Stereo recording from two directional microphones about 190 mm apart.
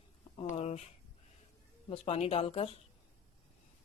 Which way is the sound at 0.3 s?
35° left (ahead or behind).